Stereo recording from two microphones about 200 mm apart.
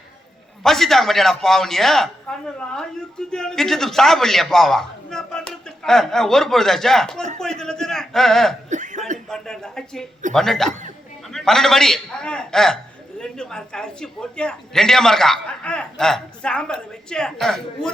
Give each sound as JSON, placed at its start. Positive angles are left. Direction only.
{"t": 0.6, "sound": "a man's voice", "side_deg": 0}
{"t": 8.7, "sound": "chuckle", "side_deg": -40}
{"t": 9.3, "sound": "a man's voice", "side_deg": 0}